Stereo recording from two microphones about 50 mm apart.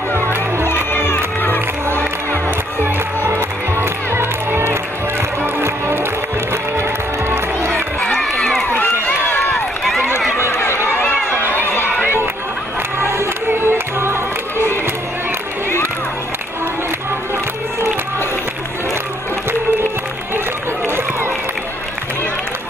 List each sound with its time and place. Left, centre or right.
0.1 s crowd: right
0.9 s crowd: left
3.3 s music: right
6.5 s music: right
8.2 s run: centre
10.4 s run: left
11.2 s crowd: right
11.5 s run: left
13.5 s music: right
20.8 s run: right